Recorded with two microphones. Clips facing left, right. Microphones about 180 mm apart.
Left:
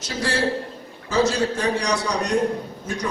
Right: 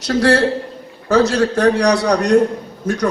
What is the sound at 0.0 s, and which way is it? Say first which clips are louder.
A man's voice: right 10 dB; 65° right (ahead or behind).